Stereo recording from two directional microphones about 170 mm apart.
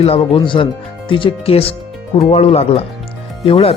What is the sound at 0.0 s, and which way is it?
Speech, 35° left (ahead or behind).